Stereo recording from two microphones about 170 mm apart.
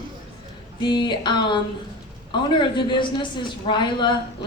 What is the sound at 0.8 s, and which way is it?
A man's voice, 25° left (ahead or behind).